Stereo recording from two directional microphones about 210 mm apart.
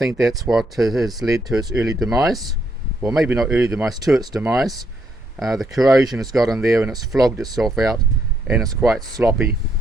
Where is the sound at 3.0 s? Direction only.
Centre (ahead or behind).